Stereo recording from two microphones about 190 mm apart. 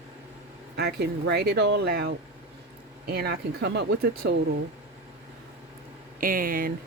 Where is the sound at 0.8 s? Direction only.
60° right (ahead or behind).